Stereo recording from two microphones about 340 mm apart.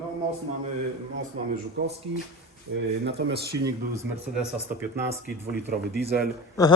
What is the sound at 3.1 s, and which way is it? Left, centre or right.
Speech, right.